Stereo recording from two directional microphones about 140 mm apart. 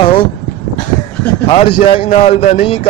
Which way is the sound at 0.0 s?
35° left (ahead or behind).